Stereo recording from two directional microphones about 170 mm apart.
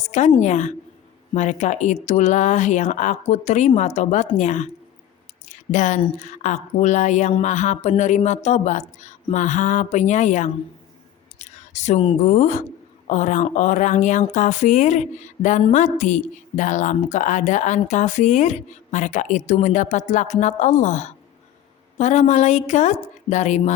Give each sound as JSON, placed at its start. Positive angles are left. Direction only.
{"t": 0.1, "sound": "speech", "side_deg": 45}
{"t": 5.5, "sound": "squish", "side_deg": 45}
{"t": 6.0, "sound": "speech", "side_deg": 45}